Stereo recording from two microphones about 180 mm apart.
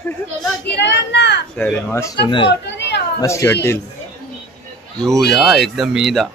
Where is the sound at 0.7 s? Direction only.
70° left (ahead or behind).